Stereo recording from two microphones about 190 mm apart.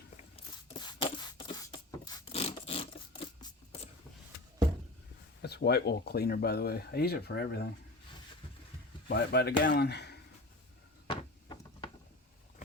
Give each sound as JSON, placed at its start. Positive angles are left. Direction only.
{"t": 2.2, "sound": "scrape", "side_deg": 30}
{"t": 5.4, "sound": "speech", "side_deg": 60}
{"t": 9.0, "sound": "speech", "side_deg": 60}
{"t": 11.1, "sound": "a sound", "side_deg": 25}